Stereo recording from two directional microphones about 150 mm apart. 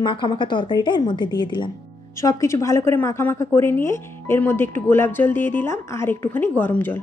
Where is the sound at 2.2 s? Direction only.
20° left (ahead or behind).